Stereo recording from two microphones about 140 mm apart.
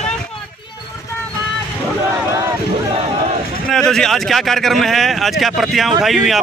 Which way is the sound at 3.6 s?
5° left (ahead or behind).